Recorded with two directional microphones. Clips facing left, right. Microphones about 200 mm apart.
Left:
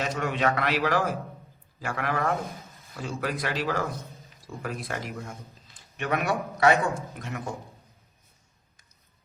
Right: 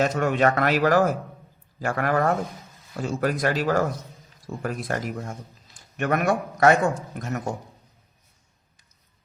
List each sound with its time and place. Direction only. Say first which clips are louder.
0.0 s speech: right 6 dB; 50° right (ahead or behind)